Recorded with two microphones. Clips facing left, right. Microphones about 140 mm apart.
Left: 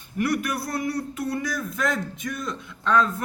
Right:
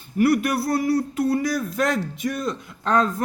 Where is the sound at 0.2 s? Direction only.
30° right (ahead or behind).